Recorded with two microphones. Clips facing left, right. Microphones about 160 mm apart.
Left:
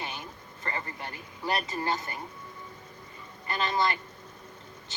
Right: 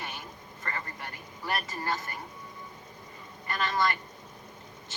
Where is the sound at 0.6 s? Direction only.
25° left (ahead or behind).